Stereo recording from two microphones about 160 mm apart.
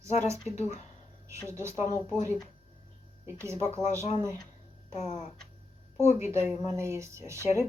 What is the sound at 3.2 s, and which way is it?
Speech, 15° right (ahead or behind).